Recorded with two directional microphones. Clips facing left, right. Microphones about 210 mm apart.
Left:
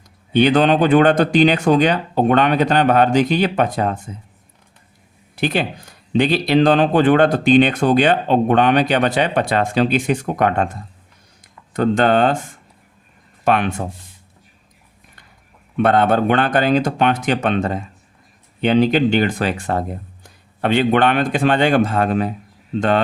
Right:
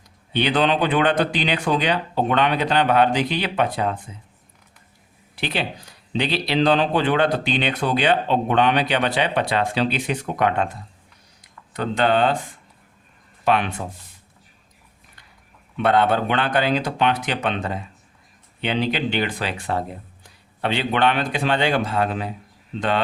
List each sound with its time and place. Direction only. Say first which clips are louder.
0.3 s speech: left 6 dB; 45° left (ahead or behind)
5.4 s speech: left 6 dB; 45° left (ahead or behind)
13.4 s speech: left 3 dB; 50° left (ahead or behind)
15.8 s speech: left 4 dB; 45° left (ahead or behind)